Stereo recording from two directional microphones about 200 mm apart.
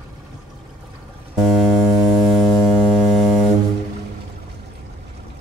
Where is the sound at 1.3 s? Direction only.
Centre (ahead or behind).